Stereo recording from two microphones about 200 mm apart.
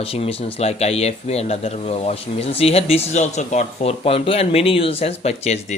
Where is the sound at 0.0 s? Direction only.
30° left (ahead or behind).